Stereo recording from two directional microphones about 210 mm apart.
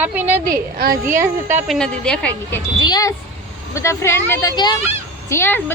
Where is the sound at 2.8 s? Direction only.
15° left (ahead or behind).